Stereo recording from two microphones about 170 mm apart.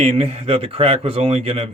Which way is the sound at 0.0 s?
40° right (ahead or behind).